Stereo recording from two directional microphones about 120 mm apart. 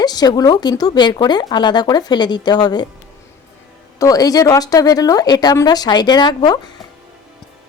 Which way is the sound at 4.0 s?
30° left (ahead or behind).